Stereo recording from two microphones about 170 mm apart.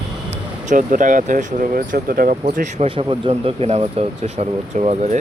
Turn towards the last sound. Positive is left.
turn(degrees=-40)  # may be behind; listen again after turning